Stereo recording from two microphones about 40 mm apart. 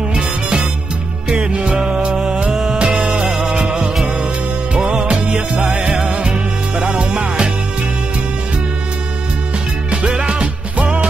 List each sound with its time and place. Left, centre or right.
0.1 s music: right
1.8 s music: centre
2.8 s music: right
3.3 s music: centre
5.1 s music: right
10.0 s music: right